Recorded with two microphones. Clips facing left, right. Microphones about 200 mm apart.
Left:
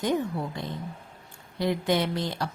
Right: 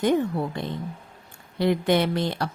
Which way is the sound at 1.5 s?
65° right (ahead or behind).